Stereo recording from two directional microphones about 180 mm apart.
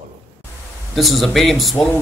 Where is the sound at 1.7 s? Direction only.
10° left (ahead or behind).